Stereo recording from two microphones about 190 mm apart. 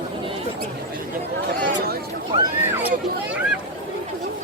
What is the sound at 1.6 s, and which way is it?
Chatter, 55° right (ahead or behind).